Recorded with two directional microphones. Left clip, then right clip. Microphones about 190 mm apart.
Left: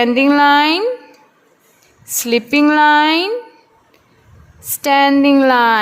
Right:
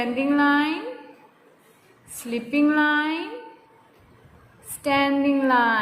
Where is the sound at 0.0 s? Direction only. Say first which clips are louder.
Left 10 dB; 50° left (ahead or behind).